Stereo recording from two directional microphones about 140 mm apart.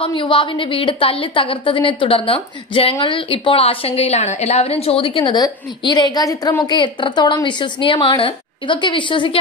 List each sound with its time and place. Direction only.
0.0 s a woman's voice: 35° left (ahead or behind)